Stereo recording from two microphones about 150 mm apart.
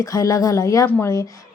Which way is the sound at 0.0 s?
25° left (ahead or behind).